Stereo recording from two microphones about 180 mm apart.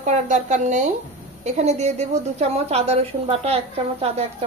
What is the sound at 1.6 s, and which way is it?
A woman's voice, 35° right (ahead or behind).